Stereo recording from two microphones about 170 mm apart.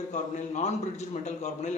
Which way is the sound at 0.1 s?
45° left (ahead or behind).